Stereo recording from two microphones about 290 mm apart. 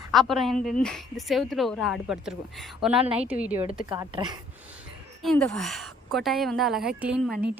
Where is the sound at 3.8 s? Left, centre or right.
Centre.